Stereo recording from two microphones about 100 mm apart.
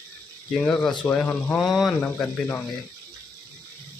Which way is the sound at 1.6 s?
Centre (ahead or behind).